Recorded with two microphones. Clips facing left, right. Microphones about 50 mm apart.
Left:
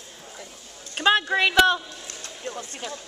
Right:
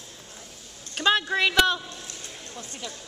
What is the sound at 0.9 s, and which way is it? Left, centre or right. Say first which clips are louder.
Speech: left 2 dB; centre.